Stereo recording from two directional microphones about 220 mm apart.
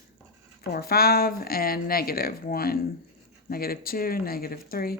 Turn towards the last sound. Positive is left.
turn(degrees=40)  # may be behind; listen again after turning